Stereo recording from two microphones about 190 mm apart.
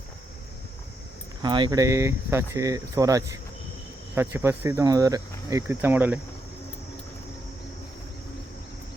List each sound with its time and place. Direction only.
1.4 s speech: 25° right (ahead or behind)